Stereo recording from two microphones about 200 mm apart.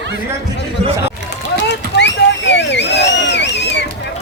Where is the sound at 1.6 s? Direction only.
60° left (ahead or behind).